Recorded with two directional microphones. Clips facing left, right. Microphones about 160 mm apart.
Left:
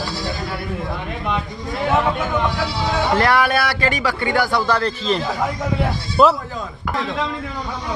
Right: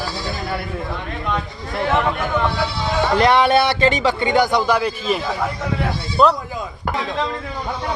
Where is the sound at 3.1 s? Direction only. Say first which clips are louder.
Right 5 dB; 20° right (ahead or behind).